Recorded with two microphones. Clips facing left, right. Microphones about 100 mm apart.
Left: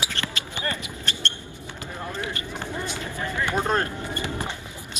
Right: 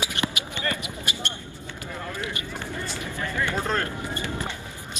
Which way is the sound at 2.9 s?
20° left (ahead or behind).